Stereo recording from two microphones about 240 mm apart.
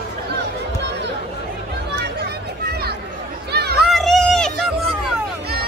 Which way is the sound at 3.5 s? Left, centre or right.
Right.